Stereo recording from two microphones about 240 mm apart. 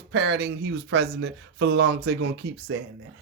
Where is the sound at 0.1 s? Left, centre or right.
Right.